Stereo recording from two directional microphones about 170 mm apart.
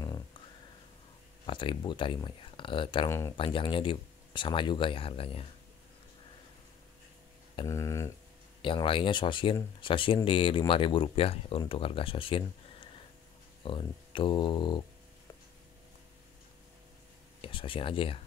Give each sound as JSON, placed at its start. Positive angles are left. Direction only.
{"t": 1.4, "sound": "speech", "side_deg": 30}
{"t": 3.1, "sound": "speech", "side_deg": 15}
{"t": 3.3, "sound": "speech", "side_deg": 30}
{"t": 7.6, "sound": "speech", "side_deg": 15}
{"t": 8.6, "sound": "speech", "side_deg": 30}
{"t": 17.4, "sound": "speech", "side_deg": 30}